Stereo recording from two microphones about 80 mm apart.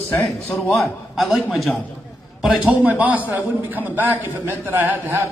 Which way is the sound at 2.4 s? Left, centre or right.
Centre.